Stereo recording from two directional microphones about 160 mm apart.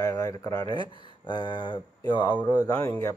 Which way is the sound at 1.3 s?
30° left (ahead or behind).